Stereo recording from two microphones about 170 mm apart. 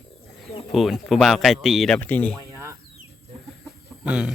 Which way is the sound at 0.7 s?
Centre (ahead or behind).